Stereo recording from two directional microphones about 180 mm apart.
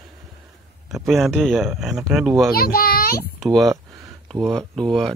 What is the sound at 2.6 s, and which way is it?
Speech, 55° left (ahead or behind).